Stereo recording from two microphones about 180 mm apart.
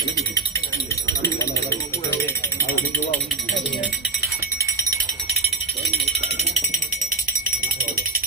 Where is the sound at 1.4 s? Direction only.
15° left (ahead or behind).